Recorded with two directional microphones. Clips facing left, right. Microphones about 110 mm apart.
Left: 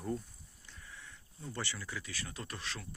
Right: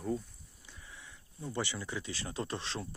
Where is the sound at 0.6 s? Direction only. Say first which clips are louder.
Even; 15° right (ahead or behind).